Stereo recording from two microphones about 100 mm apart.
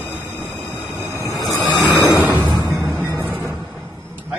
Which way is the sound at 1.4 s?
Centre (ahead or behind).